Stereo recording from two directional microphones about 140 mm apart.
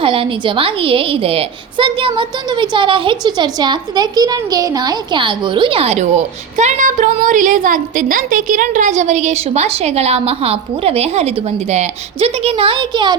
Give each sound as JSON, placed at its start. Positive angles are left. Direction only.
{"t": 0.0, "sound": "a woman's voice", "side_deg": -40}